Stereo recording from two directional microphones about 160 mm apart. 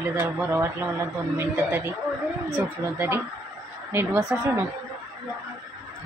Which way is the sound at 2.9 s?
15° right (ahead or behind).